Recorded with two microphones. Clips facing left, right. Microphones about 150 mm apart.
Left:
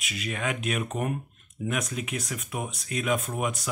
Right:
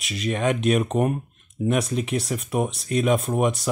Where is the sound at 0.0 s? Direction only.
35° right (ahead or behind).